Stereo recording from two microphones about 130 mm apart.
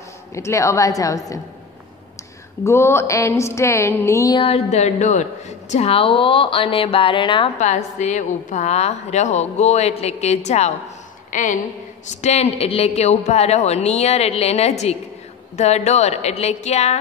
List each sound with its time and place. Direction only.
0.3 s a woman's voice: 20° left (ahead or behind)
2.6 s a woman's voice: 20° left (ahead or behind)
4.4 s a woman's voice: 50° left (ahead or behind)
7.5 s a woman's voice: 65° left (ahead or behind)
11.2 s a woman's voice: 80° left
12.1 s a woman's voice: 60° left (ahead or behind)